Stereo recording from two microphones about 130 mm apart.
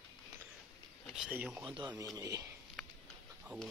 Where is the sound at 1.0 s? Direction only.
5° right (ahead or behind).